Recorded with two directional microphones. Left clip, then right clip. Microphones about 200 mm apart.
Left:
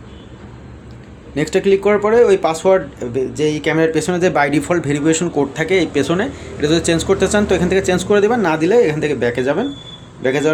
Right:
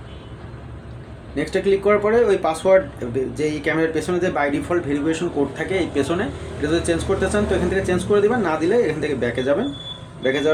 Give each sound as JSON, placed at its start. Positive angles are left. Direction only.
{"t": 1.4, "sound": "speech", "side_deg": 35}